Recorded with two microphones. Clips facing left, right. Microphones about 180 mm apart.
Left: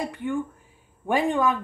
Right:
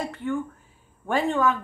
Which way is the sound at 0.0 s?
15° left (ahead or behind).